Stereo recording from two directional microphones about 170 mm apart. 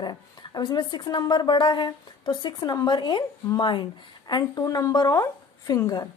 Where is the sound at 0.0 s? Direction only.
25° left (ahead or behind).